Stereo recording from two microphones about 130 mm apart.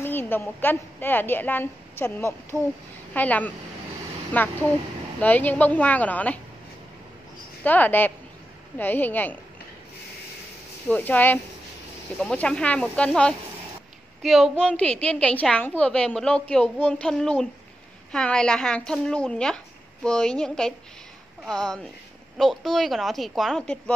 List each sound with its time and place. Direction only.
0.0 s a woman's voice: 15° left (ahead or behind)
7.6 s a woman's voice: 15° left (ahead or behind)
10.9 s a woman's voice: 15° left (ahead or behind)